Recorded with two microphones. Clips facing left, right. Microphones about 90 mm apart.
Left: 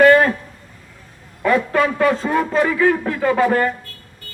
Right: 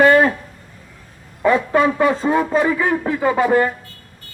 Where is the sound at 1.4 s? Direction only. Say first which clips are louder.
Right 1 dB; 20° right (ahead or behind).